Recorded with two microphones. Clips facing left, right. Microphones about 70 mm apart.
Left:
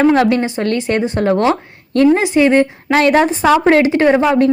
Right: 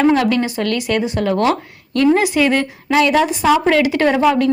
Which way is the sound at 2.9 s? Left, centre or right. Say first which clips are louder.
Left 2 dB; left.